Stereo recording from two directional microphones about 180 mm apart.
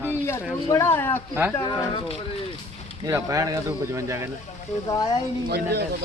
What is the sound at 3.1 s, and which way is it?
Speech, 20° right (ahead or behind).